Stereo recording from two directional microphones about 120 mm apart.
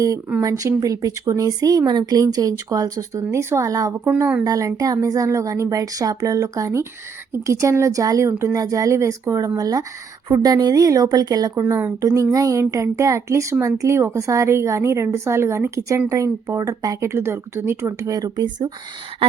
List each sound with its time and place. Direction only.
0.4 s a woman's voice: 30° right (ahead or behind)
11.6 s speech: 15° right (ahead or behind)
11.9 s speech: 25° right (ahead or behind)